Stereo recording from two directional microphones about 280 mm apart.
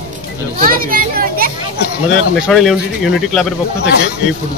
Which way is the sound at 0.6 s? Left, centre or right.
Right.